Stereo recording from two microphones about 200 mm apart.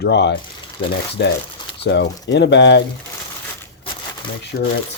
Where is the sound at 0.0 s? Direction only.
60° left (ahead or behind).